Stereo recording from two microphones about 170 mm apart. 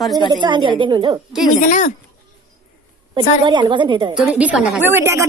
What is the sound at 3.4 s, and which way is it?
Speech, 25° right (ahead or behind).